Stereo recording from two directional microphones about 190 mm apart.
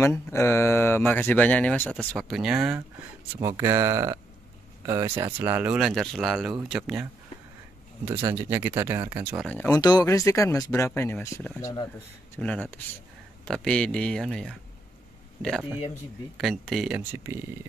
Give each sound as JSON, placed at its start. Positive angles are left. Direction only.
{"t": 0.0, "sound": "speech", "side_deg": 15}
{"t": 3.3, "sound": "speech", "side_deg": -20}
{"t": 9.7, "sound": "speech", "side_deg": 20}
{"t": 12.4, "sound": "speech", "side_deg": 0}
{"t": 16.3, "sound": "speech", "side_deg": 0}